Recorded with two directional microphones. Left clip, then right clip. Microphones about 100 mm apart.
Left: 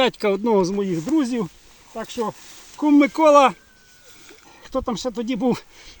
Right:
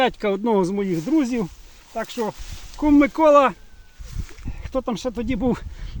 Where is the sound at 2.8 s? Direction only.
45° left (ahead or behind).